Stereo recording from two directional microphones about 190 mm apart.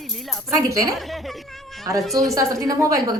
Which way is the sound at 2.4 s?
15° right (ahead or behind).